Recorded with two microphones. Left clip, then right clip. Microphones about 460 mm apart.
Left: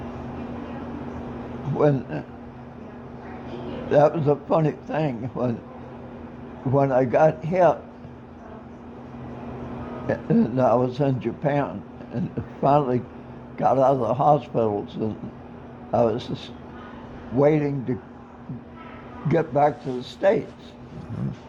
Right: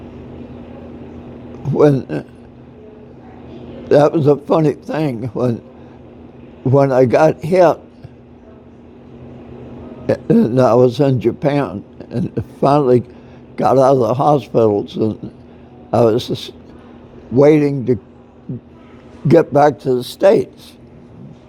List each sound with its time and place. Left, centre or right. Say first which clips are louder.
1.8 s a man's voice: right 9 dB; right
3.8 s a man's voice: right 7 dB; right
6.7 s a man's voice: right 8 dB; right
10.1 s a man's voice: right 9 dB; right
19.3 s a man's voice: right 10 dB; right